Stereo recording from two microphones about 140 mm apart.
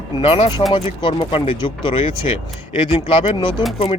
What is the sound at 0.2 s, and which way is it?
Speech, 40° left (ahead or behind).